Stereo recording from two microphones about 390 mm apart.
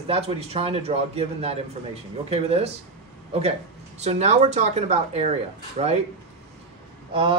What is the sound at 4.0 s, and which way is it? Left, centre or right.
A man's voice, centre.